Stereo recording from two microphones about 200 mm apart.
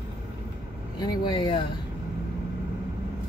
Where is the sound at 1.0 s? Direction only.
20° left (ahead or behind).